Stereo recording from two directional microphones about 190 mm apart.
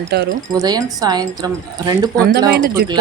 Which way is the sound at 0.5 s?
20° right (ahead or behind).